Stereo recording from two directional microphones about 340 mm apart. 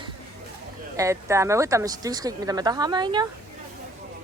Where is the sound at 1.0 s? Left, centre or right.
Centre.